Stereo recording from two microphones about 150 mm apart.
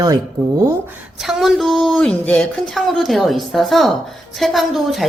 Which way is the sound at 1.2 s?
Centre (ahead or behind).